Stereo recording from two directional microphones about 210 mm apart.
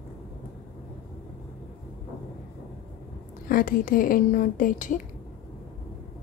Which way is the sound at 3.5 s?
40° left (ahead or behind).